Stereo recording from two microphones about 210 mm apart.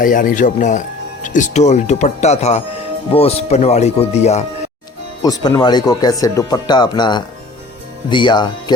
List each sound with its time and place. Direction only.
0.0 s speech: 40° left (ahead or behind)
5.2 s speech: 20° left (ahead or behind)